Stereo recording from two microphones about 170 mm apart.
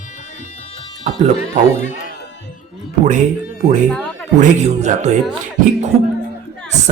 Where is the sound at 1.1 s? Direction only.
45° right (ahead or behind).